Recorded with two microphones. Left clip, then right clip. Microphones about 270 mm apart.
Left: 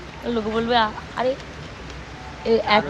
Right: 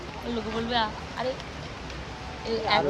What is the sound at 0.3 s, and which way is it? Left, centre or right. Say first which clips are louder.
Speech: left 8 dB; centre.